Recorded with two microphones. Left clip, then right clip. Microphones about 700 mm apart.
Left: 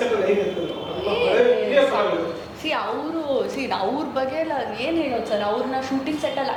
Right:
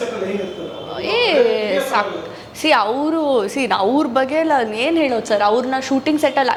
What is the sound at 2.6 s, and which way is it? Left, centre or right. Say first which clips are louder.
A woman's voice: right 10 dB; right.